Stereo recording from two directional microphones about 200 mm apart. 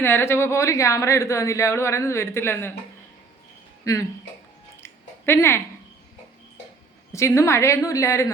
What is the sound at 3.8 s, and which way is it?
Speech, 15° left (ahead or behind).